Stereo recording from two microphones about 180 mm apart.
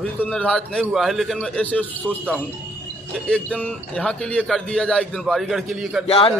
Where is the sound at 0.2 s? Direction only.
5° left (ahead or behind).